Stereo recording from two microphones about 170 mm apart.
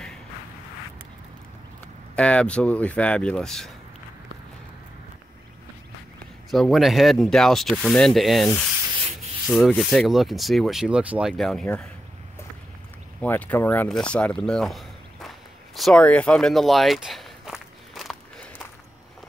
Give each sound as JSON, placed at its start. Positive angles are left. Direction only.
{"t": 2.1, "sound": "speech", "side_deg": 5}
{"t": 6.5, "sound": "speech", "side_deg": 0}
{"t": 9.5, "sound": "speech", "side_deg": 0}
{"t": 13.2, "sound": "a sound", "side_deg": 10}